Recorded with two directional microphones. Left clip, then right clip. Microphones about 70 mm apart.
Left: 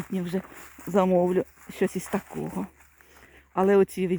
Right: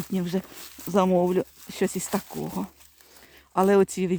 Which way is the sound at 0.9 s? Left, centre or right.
Centre.